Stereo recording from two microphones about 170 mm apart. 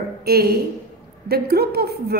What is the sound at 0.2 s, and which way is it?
A woman's voice, 65° right (ahead or behind).